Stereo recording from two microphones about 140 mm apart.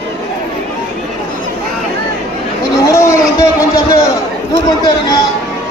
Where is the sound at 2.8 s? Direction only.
20° left (ahead or behind).